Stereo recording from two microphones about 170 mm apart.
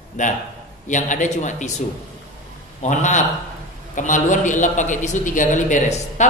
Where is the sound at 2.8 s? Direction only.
45° left (ahead or behind).